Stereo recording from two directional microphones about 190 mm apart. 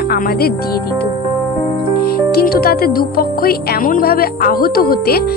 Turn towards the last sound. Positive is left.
turn(degrees=55)  # may be behind; listen again after turning